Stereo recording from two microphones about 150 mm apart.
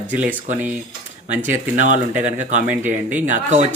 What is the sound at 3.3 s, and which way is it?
Speech, 50° right (ahead or behind).